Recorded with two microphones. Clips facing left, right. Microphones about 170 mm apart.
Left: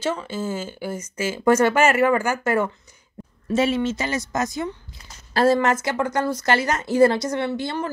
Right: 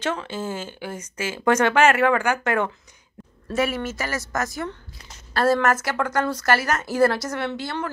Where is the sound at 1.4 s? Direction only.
5° left (ahead or behind).